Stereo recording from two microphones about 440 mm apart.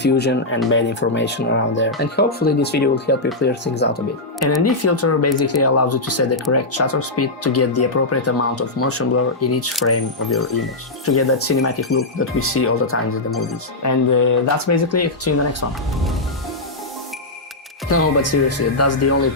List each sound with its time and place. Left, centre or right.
0.0 s speech: left
4.4 s speech: left
11.0 s speech: left
13.8 s speech: left
17.8 s speech: left